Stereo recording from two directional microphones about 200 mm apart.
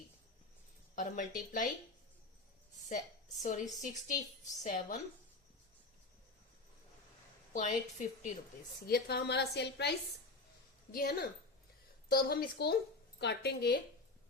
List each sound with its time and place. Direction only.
0.9 s a woman's voice: 40° left (ahead or behind)
3.4 s a woman's voice: 40° left (ahead or behind)
7.5 s a woman's voice: 40° left (ahead or behind)
8.9 s a woman's voice: 55° left (ahead or behind)
10.9 s a woman's voice: 45° left (ahead or behind)